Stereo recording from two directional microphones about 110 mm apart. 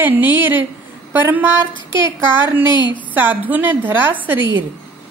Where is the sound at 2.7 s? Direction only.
45° left (ahead or behind).